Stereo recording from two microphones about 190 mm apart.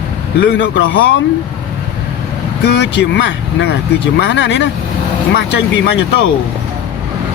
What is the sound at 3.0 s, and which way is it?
Speech, 75° left (ahead or behind).